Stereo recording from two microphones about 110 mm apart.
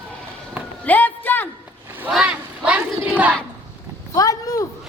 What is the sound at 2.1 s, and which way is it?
Battle cry, 5° right (ahead or behind).